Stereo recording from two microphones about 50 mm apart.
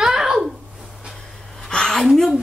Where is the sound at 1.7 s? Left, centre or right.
Centre.